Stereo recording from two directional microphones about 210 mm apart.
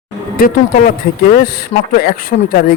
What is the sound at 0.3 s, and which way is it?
Speech, 45° left (ahead or behind).